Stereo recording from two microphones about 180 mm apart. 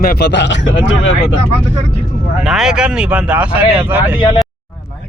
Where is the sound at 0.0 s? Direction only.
65° left (ahead or behind); by 0.7 s 85° left.